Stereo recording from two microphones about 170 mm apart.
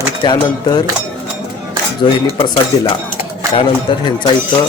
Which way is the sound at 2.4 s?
25° left (ahead or behind).